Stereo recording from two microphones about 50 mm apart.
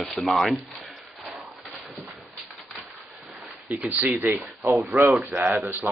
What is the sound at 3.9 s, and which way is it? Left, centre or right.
Speech, right.